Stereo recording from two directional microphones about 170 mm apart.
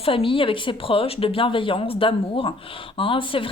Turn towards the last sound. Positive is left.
turn(degrees=30)  # may be behind; listen again after turning